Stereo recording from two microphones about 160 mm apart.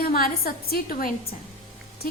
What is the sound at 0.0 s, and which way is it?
A woman's voice, 70° left (ahead or behind).